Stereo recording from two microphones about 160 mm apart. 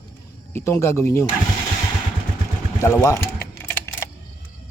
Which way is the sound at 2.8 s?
20° left (ahead or behind).